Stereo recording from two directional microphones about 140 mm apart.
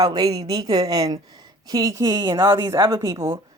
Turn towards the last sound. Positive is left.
turn(degrees=-20)  # may be behind; listen again after turning